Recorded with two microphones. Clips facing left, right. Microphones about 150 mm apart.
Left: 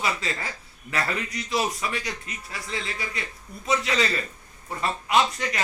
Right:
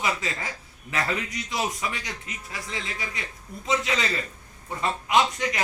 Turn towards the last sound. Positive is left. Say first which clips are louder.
# even
turn(degrees=-15)  # may be behind; listen again after turning